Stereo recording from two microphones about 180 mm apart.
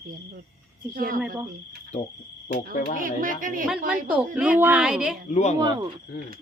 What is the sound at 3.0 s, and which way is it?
Speech, 50° right (ahead or behind).